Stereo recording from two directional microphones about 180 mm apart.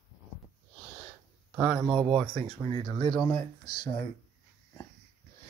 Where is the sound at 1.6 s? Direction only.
5° right (ahead or behind).